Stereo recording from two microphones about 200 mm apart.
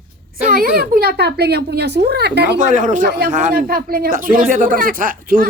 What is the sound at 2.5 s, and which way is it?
Speech, 35° right (ahead or behind).